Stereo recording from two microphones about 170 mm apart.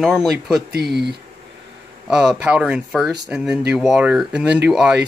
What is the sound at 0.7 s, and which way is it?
Speech, 70° right (ahead or behind).